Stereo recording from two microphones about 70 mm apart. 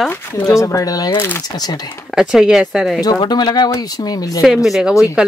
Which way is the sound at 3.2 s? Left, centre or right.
Left.